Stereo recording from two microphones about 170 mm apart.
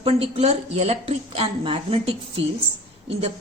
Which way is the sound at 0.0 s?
35° right (ahead or behind).